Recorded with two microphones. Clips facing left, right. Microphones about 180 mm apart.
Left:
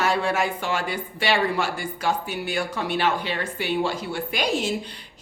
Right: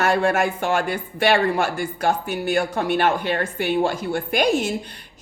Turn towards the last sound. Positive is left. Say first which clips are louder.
# right 5 dB
turn(degrees=-50)  # may be behind; listen again after turning